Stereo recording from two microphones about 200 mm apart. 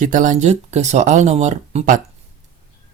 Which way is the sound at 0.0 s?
40° right (ahead or behind).